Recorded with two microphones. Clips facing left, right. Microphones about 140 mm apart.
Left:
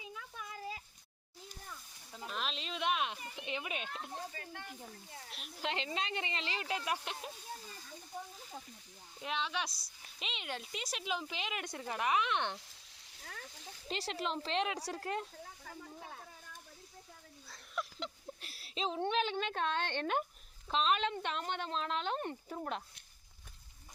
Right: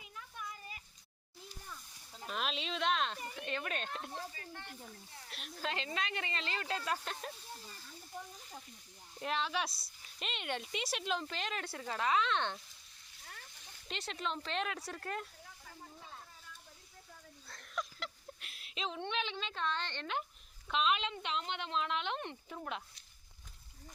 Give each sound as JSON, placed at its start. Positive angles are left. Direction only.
{"t": 0.2, "sound": "a sound", "side_deg": 90}
{"t": 2.2, "sound": "a sound", "side_deg": 0}
{"t": 3.3, "sound": "speech", "side_deg": 15}
{"t": 5.3, "sound": "speech", "side_deg": 0}
{"t": 5.5, "sound": "speech", "side_deg": 25}
{"t": 9.1, "sound": "speech", "side_deg": 0}
{"t": 13.2, "sound": "a sound", "side_deg": 75}
{"t": 13.8, "sound": "speech", "side_deg": 30}
{"t": 15.6, "sound": "snake", "side_deg": 70}
{"t": 17.9, "sound": "a sound", "side_deg": 20}
{"t": 18.3, "sound": "a woman's voice", "side_deg": 35}
{"t": 20.7, "sound": "speech", "side_deg": 35}